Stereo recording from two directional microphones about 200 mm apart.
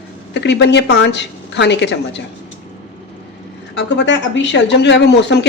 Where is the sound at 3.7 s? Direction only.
60° left (ahead or behind).